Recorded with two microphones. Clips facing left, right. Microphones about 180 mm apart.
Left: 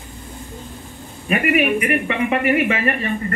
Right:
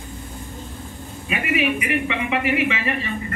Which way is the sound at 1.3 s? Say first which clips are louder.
Left 5 dB; 50° left (ahead or behind).